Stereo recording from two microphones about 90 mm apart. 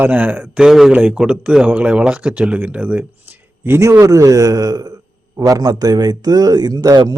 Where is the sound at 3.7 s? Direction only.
35° right (ahead or behind); by 7.2 s 50° right (ahead or behind).